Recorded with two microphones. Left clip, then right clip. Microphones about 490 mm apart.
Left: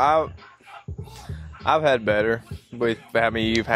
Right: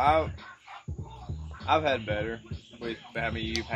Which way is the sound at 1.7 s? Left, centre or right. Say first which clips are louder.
Left 7 dB; left.